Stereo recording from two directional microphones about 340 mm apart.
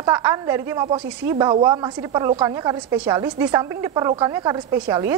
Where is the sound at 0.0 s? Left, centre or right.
Centre.